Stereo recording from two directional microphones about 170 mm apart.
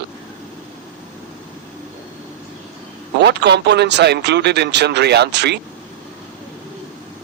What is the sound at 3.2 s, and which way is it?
A man's voice, 85° right.